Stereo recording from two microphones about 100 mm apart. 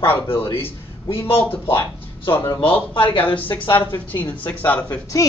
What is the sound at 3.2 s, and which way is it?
Speech, 15° left (ahead or behind).